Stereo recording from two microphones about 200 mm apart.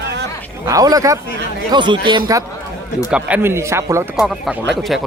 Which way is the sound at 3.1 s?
10° right (ahead or behind).